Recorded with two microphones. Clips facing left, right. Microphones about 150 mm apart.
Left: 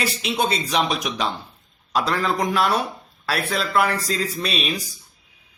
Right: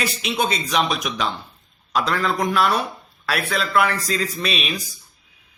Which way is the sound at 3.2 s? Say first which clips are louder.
Even; 30° left (ahead or behind).